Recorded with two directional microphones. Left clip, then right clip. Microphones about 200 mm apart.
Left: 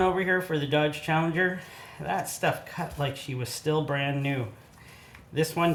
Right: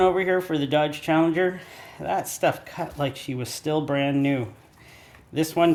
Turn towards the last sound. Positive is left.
turn(degrees=-45)  # may be behind; listen again after turning